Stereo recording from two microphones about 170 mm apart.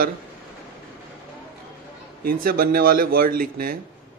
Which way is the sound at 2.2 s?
60° right (ahead or behind).